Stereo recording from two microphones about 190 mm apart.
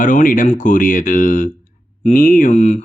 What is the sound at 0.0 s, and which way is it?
Speech, 45° left (ahead or behind).